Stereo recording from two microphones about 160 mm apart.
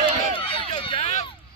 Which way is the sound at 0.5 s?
35° left (ahead or behind).